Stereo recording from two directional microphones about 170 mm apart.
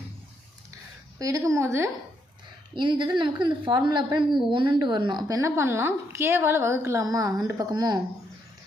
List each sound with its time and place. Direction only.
1.2 s a woman's voice: 20° right (ahead or behind)
2.7 s a woman's voice: 30° right (ahead or behind)